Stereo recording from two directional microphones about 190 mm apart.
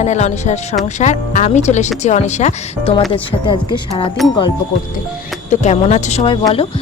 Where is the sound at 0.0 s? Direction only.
35° left (ahead or behind).